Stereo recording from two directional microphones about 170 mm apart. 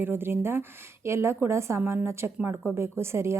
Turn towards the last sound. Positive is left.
turn(degrees=-15)  # may be behind; listen again after turning